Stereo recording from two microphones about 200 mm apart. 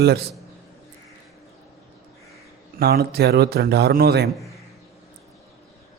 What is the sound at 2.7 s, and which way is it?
A man's voice, 50° right (ahead or behind).